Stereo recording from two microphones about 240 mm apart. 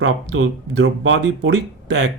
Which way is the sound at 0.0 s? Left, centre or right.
Right.